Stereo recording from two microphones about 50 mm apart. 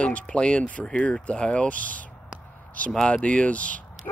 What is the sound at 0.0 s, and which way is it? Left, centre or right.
Speech, left.